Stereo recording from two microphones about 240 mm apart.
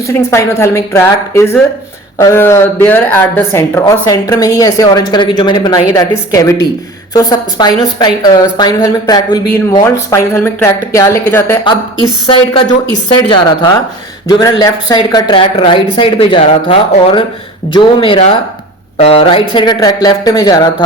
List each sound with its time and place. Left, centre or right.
0.3 s speech: centre
12.3 s speech: centre